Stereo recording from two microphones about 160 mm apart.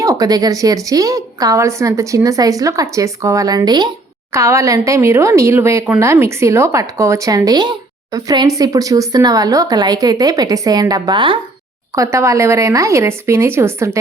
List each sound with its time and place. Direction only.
0.0 s a woman's voice: 20° right (ahead or behind)
11.9 s speech: 20° right (ahead or behind)